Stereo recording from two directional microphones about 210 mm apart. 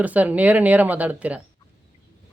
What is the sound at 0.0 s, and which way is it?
Speech, 5° right (ahead or behind).